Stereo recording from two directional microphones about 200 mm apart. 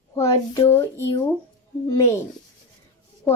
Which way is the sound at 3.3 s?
5° left (ahead or behind).